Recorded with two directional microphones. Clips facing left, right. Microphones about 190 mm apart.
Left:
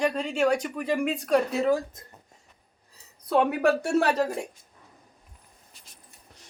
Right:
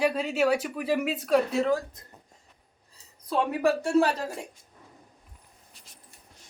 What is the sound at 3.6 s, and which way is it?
Speech, 65° left (ahead or behind).